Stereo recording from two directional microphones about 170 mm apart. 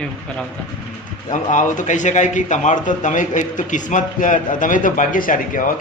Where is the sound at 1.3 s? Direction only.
45° left (ahead or behind).